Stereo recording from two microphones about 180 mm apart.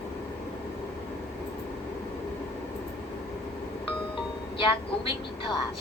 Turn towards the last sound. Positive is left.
turn(degrees=30)  # may be behind; listen again after turning